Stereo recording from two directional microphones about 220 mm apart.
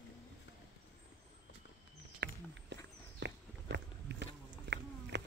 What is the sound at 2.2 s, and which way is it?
Walk, 50° right (ahead or behind).